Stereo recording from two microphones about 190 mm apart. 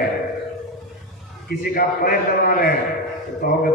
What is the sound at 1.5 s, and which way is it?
Speech, 55° left (ahead or behind).